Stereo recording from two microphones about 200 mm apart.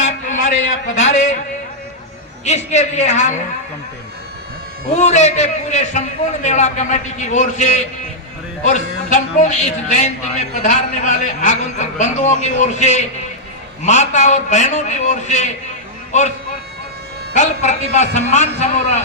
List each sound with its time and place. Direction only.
0.0 s a sound: 40° left (ahead or behind)
2.4 s a man's voice: 35° left (ahead or behind)
4.9 s a man's voice: 35° left (ahead or behind)
17.3 s a man's voice: 35° left (ahead or behind)